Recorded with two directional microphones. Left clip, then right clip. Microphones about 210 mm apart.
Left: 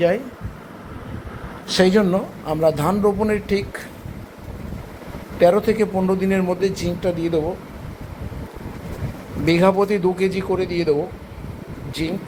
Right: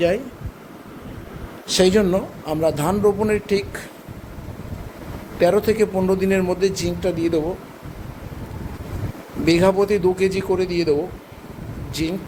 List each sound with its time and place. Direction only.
1.7 s a man's voice: 20° right (ahead or behind)
5.4 s a man's voice: 15° right (ahead or behind)
9.5 s a man's voice: 10° right (ahead or behind)
12.0 s a man's voice: 15° right (ahead or behind)